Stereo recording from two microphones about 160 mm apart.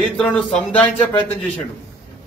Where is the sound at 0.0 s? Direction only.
5° left (ahead or behind).